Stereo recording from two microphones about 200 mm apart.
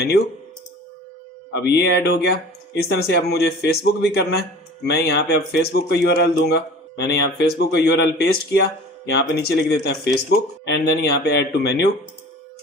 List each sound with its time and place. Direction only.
1.5 s a man's voice: 55° left (ahead or behind)